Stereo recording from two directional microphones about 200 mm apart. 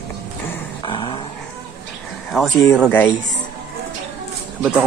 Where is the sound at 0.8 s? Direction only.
25° left (ahead or behind).